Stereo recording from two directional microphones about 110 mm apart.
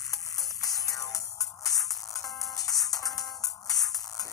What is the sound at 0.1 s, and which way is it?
Music, 35° left (ahead or behind).